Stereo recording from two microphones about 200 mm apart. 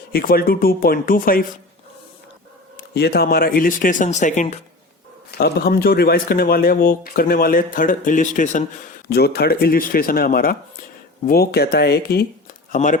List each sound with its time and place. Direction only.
0.1 s speech: 50° left (ahead or behind)
2.7 s speech: 55° left (ahead or behind); by 4.6 s 40° left (ahead or behind)
5.4 s speech: 50° left (ahead or behind)
9.0 s speech: 55° left (ahead or behind)
12.7 s speech: 40° left (ahead or behind)